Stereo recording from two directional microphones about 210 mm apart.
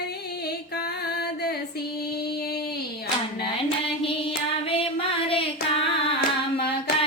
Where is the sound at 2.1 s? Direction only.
50° left (ahead or behind).